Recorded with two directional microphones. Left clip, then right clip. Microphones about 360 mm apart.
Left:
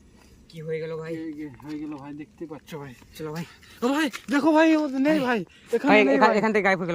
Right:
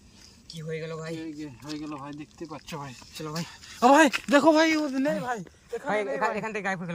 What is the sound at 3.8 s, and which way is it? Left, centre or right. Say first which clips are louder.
Speech: right 7 dB; centre.